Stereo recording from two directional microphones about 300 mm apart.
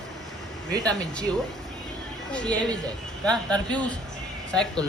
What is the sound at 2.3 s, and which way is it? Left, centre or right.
Speech, centre.